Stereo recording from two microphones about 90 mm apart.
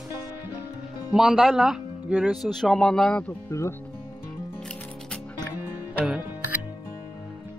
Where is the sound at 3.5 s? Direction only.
35° left (ahead or behind).